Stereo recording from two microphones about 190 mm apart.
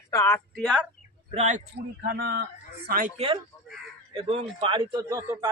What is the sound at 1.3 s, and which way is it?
Speech, 40° right (ahead or behind).